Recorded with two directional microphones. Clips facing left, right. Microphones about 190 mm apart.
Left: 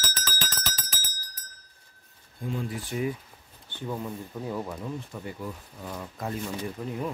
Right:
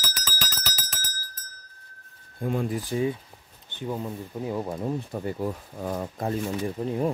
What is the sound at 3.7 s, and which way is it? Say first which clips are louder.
Speech: right 2 dB; 20° right (ahead or behind).